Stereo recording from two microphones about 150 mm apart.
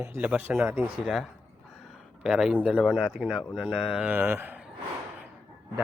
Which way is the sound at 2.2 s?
5° right (ahead or behind).